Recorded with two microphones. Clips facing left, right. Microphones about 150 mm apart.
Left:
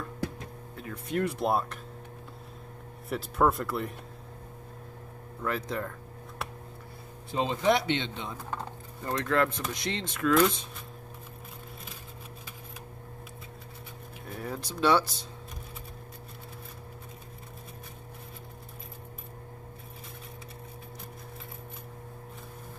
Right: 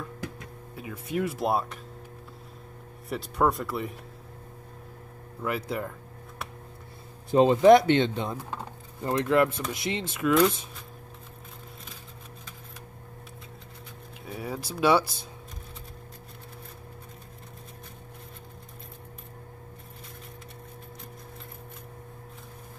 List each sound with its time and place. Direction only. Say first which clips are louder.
0.7 s speech: right 1 dB; 5° right (ahead or behind)
3.1 s speech: even; centre (ahead or behind)
5.4 s speech: right 2 dB; 10° right (ahead or behind)
7.2 s speech: right 10 dB; 50° right (ahead or behind)
8.5 s a sound: left 1 dB; 10° right (ahead or behind)
9.1 s speech: right 4 dB; 20° right (ahead or behind)
9.6 s speech: right 2 dB; 5° right (ahead or behind)
14.2 s speech: right 2 dB; 5° right (ahead or behind)